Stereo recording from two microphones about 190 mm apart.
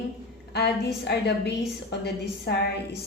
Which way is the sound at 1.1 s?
60° left (ahead or behind).